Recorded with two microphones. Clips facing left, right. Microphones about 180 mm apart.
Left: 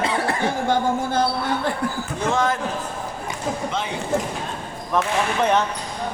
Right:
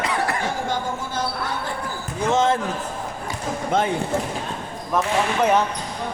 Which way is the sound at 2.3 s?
25° right (ahead or behind).